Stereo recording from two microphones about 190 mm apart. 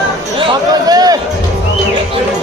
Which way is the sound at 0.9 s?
20° right (ahead or behind).